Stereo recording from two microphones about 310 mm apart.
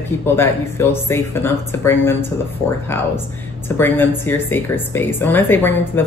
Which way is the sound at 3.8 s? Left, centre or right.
Centre.